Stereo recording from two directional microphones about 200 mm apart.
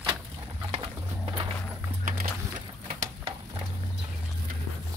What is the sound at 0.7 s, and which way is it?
Music, 25° right (ahead or behind).